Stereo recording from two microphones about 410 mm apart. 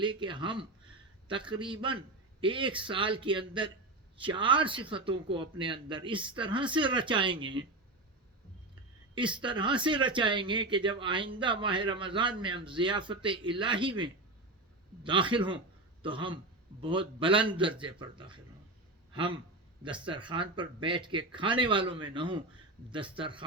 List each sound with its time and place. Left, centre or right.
0.0 s speech: centre
9.1 s speech: centre
19.8 s speech: centre